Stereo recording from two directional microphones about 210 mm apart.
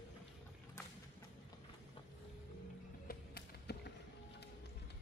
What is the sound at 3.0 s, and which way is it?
Music, 50° left (ahead or behind).